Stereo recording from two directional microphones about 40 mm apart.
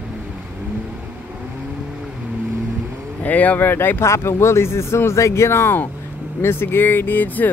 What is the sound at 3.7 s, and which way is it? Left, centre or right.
Speech, left.